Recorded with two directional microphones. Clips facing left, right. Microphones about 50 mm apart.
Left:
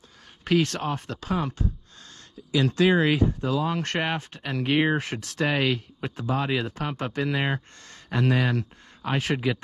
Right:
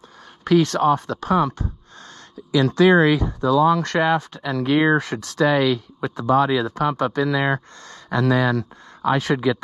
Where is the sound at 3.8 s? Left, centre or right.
Right.